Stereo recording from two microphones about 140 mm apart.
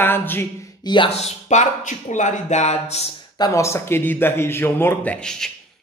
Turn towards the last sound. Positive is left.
turn(degrees=5)  # may be behind; listen again after turning